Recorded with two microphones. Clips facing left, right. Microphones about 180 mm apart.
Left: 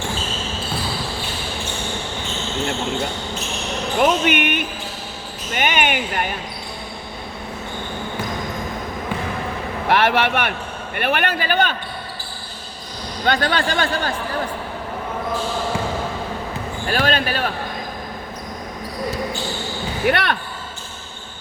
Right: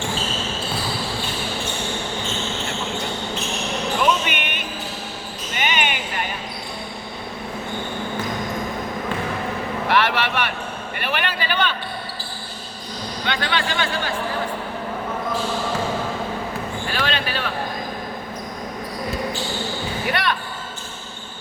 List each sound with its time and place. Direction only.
4.0 s music: 50° left (ahead or behind)
5.5 s basketball bounce: 50° left (ahead or behind)
9.9 s vehicle: 50° left (ahead or behind)
10.9 s a sound: 50° left (ahead or behind)
13.2 s a sound: 45° left (ahead or behind)
16.9 s basketball bounce: 45° left (ahead or behind)
20.1 s basketball bounce: 60° left (ahead or behind)